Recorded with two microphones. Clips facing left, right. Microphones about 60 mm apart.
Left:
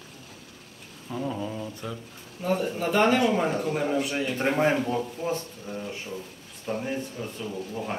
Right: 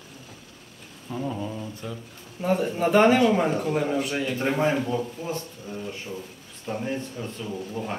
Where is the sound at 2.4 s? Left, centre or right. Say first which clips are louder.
Right 3 dB; right.